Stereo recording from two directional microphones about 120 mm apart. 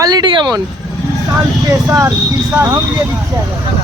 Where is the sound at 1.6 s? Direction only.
30° right (ahead or behind).